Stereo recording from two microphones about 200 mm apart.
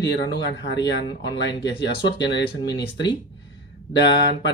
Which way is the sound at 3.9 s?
60° left (ahead or behind).